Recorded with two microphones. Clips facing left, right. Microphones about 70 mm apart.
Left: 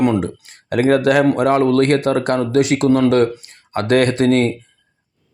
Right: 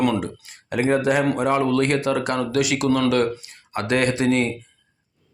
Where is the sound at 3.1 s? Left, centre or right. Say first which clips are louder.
Left 5 dB; left.